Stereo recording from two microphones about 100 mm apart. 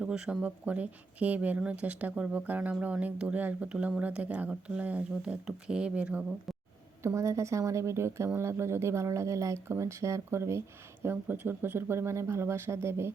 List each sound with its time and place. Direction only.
0.0 s speech: 10° right (ahead or behind)
7.0 s speech: 30° right (ahead or behind)